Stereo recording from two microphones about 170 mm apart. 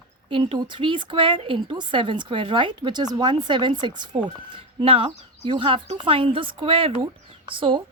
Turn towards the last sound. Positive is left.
turn(degrees=-30)  # may be behind; listen again after turning